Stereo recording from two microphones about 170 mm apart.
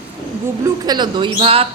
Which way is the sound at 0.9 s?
25° right (ahead or behind).